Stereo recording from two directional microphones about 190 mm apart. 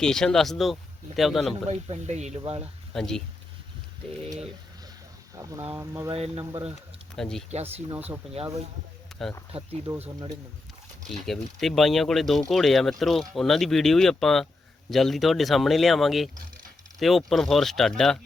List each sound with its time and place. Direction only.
0.0 s speech: 5° left (ahead or behind)
1.7 s speech: 35° right (ahead or behind)
2.9 s speech: centre (ahead or behind)
5.4 s speech: 15° right (ahead or behind)
6.1 s speech: 30° right (ahead or behind)
7.2 s speech: 5° left (ahead or behind)
7.5 s speech: 30° right (ahead or behind)
9.1 s a sound: 5° left (ahead or behind)
9.5 s speech: 30° right (ahead or behind)
11.2 s speech: centre (ahead or behind)